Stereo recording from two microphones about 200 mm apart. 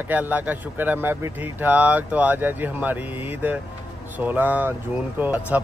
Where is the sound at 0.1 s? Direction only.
10° right (ahead or behind).